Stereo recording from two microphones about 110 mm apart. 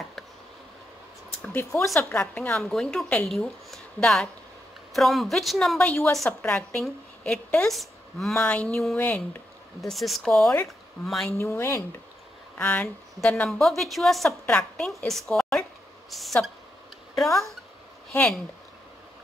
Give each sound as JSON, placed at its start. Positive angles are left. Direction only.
{"t": 1.4, "sound": "a woman's voice", "side_deg": 20}
{"t": 2.5, "sound": "a woman's voice", "side_deg": 5}
{"t": 8.5, "sound": "a woman's voice", "side_deg": 15}
{"t": 9.8, "sound": "a woman's voice", "side_deg": 0}
{"t": 11.2, "sound": "speech", "side_deg": 25}
{"t": 12.5, "sound": "a woman's voice", "side_deg": 10}